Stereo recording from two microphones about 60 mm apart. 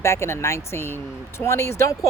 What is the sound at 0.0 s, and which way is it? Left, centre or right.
Speech, left.